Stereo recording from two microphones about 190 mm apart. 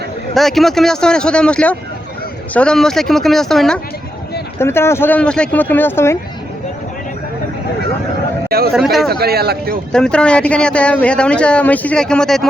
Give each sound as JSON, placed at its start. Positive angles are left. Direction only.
{"t": 0.3, "sound": "speech", "side_deg": 0}
{"t": 4.5, "sound": "speech", "side_deg": 15}
{"t": 8.4, "sound": "speech", "side_deg": -55}
{"t": 8.7, "sound": "speech", "side_deg": 0}
{"t": 9.0, "sound": "speech", "side_deg": -55}
{"t": 9.9, "sound": "speech", "side_deg": 5}